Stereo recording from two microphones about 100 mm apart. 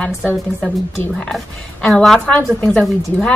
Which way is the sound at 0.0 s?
15° left (ahead or behind).